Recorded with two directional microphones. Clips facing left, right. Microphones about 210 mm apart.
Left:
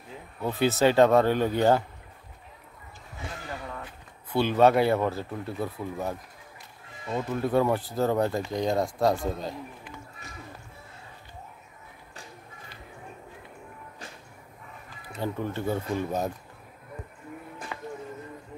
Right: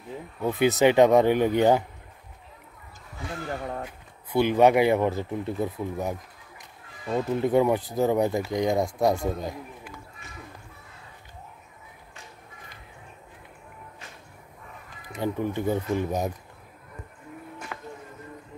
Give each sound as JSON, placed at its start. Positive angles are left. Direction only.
{"t": 0.4, "sound": "speech", "side_deg": -15}
{"t": 4.3, "sound": "speech", "side_deg": -15}
{"t": 15.1, "sound": "speech", "side_deg": -15}
{"t": 17.7, "sound": "music", "side_deg": 0}